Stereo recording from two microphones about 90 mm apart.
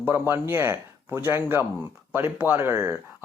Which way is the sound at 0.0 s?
25° right (ahead or behind).